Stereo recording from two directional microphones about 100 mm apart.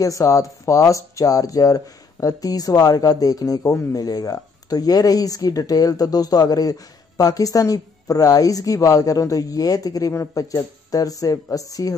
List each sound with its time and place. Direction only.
0.0 s speech: 35° left (ahead or behind)